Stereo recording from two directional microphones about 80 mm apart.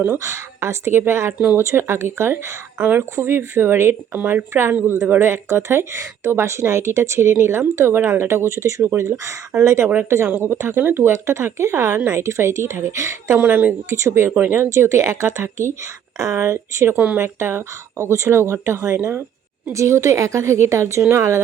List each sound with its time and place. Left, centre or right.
0.2 s speech: right
1.5 s speech: right
4.2 s speech: right
4.5 s speech: right
16.9 s speech: centre
17.2 s speech: right